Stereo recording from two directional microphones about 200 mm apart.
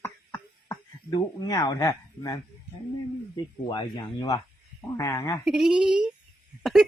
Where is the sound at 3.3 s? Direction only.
20° left (ahead or behind).